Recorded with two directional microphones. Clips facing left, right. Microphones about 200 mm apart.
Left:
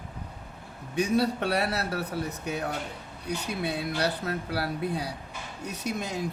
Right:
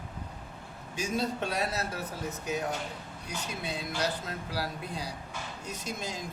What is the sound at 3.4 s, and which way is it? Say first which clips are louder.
Speech: left 5 dB; 60° left (ahead or behind).